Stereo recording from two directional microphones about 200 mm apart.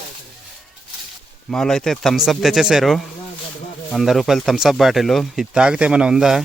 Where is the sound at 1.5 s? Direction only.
5° left (ahead or behind).